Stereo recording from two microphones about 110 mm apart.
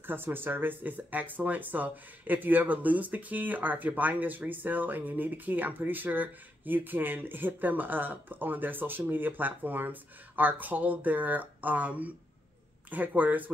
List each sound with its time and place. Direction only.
0.0 s speech: 20° right (ahead or behind)